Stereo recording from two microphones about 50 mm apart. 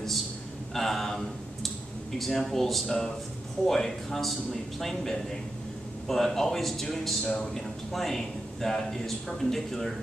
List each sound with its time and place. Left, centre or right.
0.7 s a sound: centre
2.1 s a man's voice: centre
7.2 s a man's voice: centre
7.9 s a man's voice: centre